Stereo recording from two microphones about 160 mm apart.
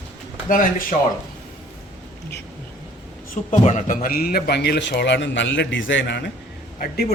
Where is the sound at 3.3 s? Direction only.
50° left (ahead or behind); by 6.3 s 90° left.